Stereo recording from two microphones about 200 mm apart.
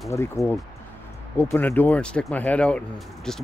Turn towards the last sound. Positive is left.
turn(degrees=5)  # may be behind; listen again after turning